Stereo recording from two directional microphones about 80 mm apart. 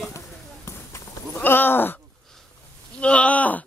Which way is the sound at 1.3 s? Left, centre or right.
Left.